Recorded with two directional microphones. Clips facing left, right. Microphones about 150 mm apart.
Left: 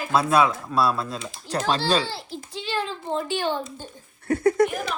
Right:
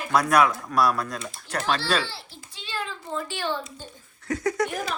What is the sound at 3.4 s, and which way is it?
Speech, 50° left (ahead or behind).